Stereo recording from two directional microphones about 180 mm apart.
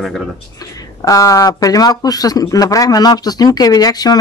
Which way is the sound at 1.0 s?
20° left (ahead or behind).